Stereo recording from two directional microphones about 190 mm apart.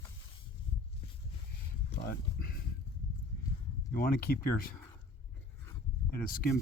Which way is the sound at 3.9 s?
50° left (ahead or behind).